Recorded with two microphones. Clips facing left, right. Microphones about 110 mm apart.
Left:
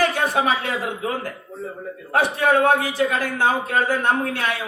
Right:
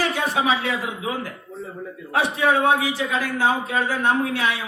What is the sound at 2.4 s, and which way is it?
A man's voice, 55° left (ahead or behind).